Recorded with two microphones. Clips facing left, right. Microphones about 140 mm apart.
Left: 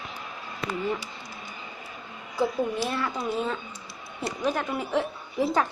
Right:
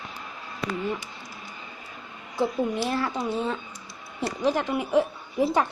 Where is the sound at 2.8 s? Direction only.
30° right (ahead or behind).